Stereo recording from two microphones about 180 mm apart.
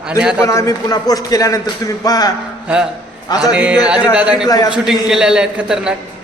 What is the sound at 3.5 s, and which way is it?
A man's voice, 5° right (ahead or behind).